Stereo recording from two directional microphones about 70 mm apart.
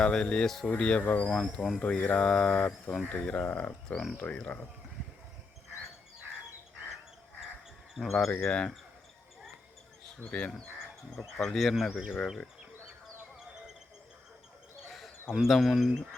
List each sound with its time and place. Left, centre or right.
0.0 s mantra: centre
0.7 s speech: centre
1.5 s speech: centre
1.8 s mantra: centre
2.6 s speech: centre
3.0 s mantra: centre
3.8 s speech: centre
4.2 s speech: centre
7.9 s speech: centre
8.4 s mantra: centre
11.3 s speech: centre
14.8 s speech: centre